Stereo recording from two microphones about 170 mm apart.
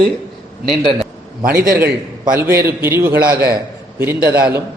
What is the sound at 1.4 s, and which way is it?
Speech, 55° right (ahead or behind).